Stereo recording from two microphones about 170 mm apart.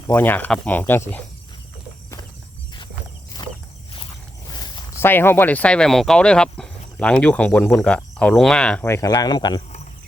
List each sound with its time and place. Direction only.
0.1 s speech: 10° left (ahead or behind)
3.4 s a sound: 30° left (ahead or behind)
5.0 s speech: 10° left (ahead or behind)